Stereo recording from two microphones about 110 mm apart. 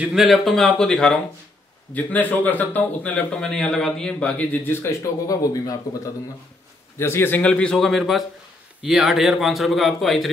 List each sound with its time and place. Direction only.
0.1 s a man's voice: centre (ahead or behind)
4.8 s speech: 30° left (ahead or behind)
7.0 s a man's voice: 20° left (ahead or behind); by 10.3 s centre (ahead or behind)